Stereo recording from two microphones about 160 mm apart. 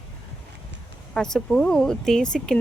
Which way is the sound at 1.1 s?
5° left (ahead or behind).